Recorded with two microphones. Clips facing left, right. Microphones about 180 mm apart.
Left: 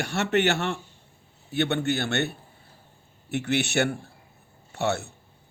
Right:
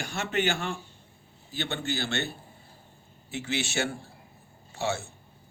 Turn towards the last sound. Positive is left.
turn(degrees=65)  # may be behind; listen again after turning